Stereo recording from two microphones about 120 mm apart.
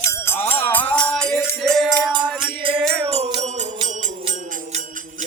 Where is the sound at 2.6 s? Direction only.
50° right (ahead or behind).